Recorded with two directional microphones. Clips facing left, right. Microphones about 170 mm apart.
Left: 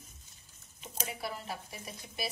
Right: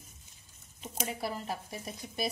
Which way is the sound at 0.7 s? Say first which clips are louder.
Right 4 dB; 40° right (ahead or behind).